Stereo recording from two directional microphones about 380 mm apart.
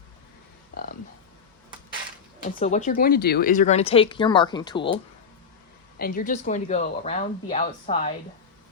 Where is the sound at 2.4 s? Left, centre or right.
Centre.